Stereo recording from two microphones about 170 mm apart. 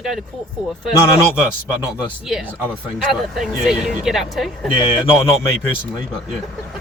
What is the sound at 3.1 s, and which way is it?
Speech, centre (ahead or behind).